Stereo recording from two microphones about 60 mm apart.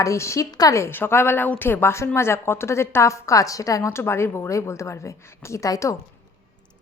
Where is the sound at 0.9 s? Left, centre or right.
Left.